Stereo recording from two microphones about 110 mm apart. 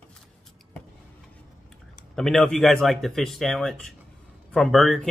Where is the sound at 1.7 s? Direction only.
5° left (ahead or behind).